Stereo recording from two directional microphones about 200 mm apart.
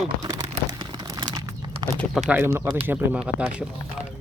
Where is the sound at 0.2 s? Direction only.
20° right (ahead or behind).